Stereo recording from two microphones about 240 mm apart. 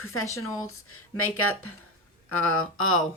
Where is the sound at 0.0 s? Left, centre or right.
Left.